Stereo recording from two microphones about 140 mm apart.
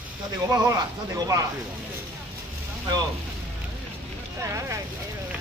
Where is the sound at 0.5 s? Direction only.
25° right (ahead or behind).